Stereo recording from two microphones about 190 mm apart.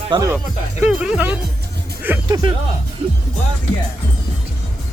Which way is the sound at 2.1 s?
10° right (ahead or behind).